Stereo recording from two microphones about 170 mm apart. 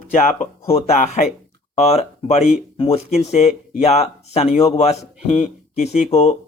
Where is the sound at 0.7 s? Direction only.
40° left (ahead or behind).